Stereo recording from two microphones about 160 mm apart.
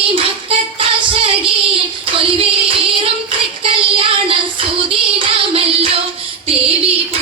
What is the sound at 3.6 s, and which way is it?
Child singing, 35° right (ahead or behind).